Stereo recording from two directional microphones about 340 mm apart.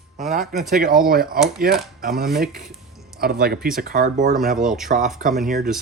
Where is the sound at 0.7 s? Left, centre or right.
Right.